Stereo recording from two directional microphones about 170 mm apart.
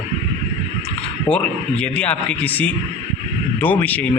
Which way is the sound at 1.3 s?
5° left (ahead or behind).